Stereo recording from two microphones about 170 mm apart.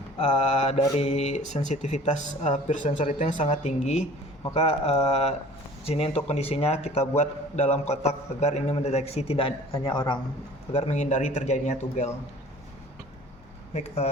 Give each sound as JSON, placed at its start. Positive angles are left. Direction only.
{"t": 0.2, "sound": "a man's voice", "side_deg": 40}
{"t": 10.7, "sound": "a man's voice", "side_deg": 40}
{"t": 13.7, "sound": "a man's voice", "side_deg": 40}